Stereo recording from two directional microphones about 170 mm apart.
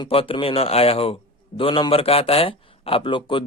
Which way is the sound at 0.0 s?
30° left (ahead or behind).